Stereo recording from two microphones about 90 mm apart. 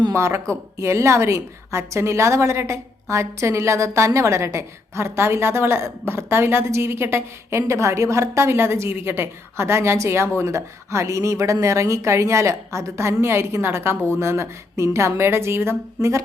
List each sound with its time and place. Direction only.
0.1 s a woman's voice: 35° right (ahead or behind)